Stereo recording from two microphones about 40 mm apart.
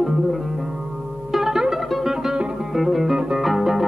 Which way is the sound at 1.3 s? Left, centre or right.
Centre.